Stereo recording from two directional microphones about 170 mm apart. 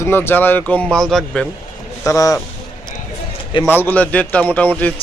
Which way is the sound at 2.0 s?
20° left (ahead or behind).